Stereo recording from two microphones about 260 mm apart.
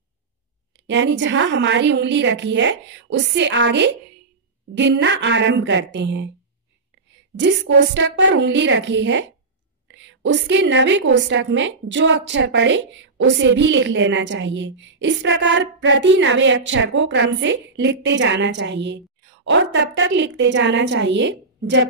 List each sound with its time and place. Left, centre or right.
0.8 s a woman's voice: right